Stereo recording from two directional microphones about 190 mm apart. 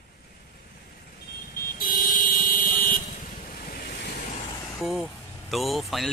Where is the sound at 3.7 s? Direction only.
60° left (ahead or behind).